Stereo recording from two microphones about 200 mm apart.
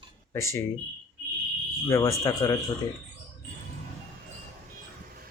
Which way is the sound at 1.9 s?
15° left (ahead or behind).